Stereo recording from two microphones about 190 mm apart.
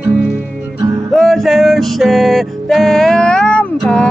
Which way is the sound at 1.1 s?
Centre (ahead or behind).